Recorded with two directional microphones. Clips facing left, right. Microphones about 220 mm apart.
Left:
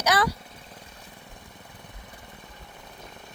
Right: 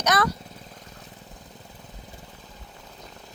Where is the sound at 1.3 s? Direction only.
20° right (ahead or behind).